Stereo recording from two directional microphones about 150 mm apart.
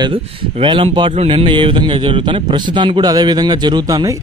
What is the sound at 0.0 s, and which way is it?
Speech, 35° right (ahead or behind).